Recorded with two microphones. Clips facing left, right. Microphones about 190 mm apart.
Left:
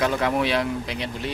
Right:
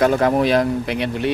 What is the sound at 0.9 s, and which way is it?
Speech, 60° right (ahead or behind).